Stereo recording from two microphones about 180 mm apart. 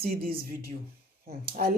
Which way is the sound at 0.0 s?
55° right (ahead or behind).